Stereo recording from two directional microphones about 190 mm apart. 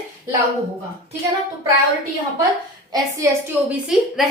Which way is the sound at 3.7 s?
Centre (ahead or behind).